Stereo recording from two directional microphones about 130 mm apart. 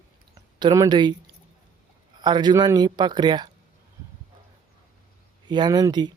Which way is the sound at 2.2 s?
35° right (ahead or behind).